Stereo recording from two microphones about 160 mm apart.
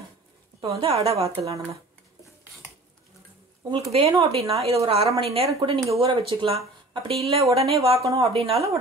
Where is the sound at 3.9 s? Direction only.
40° right (ahead or behind).